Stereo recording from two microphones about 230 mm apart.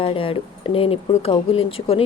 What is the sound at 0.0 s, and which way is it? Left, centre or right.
Speech, left.